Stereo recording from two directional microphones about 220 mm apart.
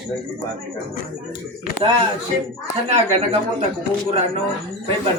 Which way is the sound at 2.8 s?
25° right (ahead or behind).